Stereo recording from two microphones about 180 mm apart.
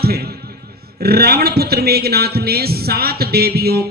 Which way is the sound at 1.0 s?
60° right (ahead or behind).